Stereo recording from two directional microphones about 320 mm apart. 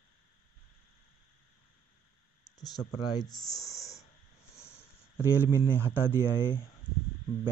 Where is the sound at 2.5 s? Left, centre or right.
Centre.